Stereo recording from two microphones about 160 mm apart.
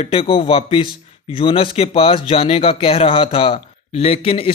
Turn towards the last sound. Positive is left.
turn(degrees=35)  # may be behind; listen again after turning